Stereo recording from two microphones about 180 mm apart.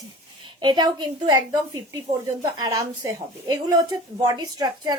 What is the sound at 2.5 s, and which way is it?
A woman's voice, 20° right (ahead or behind).